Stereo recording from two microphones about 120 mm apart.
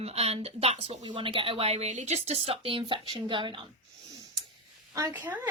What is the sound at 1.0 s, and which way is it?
Speech, 45° right (ahead or behind).